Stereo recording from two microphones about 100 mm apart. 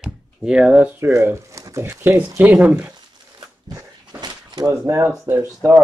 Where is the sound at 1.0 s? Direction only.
25° right (ahead or behind).